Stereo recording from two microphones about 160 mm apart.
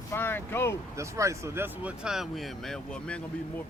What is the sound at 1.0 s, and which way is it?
Speech, 20° right (ahead or behind).